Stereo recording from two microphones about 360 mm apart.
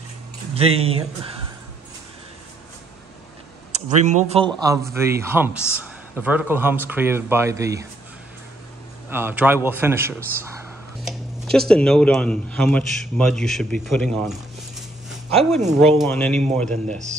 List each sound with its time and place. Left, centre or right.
0.6 s speech: centre
3.7 s speech: centre
9.1 s speech: centre
15.0 s a sound: centre
16.0 s speech: centre